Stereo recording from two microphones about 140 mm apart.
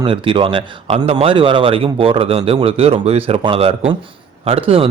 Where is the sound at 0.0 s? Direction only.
40° right (ahead or behind).